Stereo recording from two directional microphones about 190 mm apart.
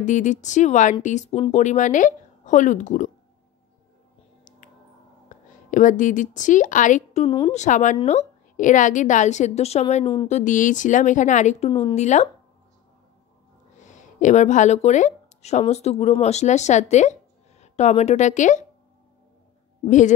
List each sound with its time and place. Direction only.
0.0 s a woman's voice: 40° left (ahead or behind)
5.3 s a woman's voice: 40° left (ahead or behind)
7.2 s a woman's voice: 30° left (ahead or behind)
13.7 s speech: 40° left (ahead or behind)